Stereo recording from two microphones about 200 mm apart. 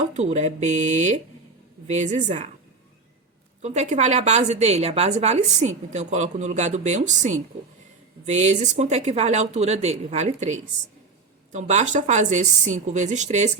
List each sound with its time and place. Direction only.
0.1 s a woman's voice: 35° right (ahead or behind)
3.6 s a woman's voice: 35° right (ahead or behind)